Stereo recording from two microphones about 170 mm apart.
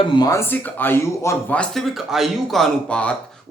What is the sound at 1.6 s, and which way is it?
Speech, centre (ahead or behind).